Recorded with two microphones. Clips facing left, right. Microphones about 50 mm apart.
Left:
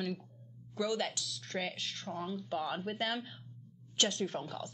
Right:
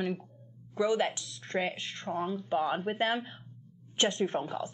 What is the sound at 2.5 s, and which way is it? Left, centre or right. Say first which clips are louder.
A woman's voice: right 7 dB; right.